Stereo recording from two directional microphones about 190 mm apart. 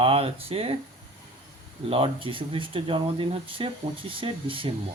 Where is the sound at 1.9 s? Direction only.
30° right (ahead or behind).